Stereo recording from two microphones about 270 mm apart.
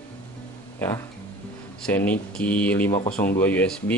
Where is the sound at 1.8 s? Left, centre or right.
Centre.